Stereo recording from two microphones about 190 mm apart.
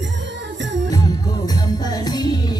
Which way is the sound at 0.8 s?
20° left (ahead or behind).